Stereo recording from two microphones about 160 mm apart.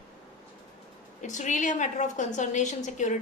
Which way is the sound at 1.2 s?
50° left (ahead or behind).